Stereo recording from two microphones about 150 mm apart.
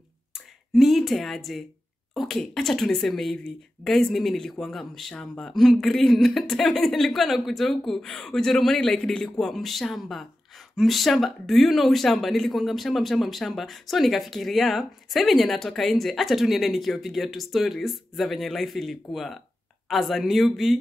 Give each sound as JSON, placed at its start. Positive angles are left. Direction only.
{"t": 0.7, "sound": "speech", "side_deg": 0}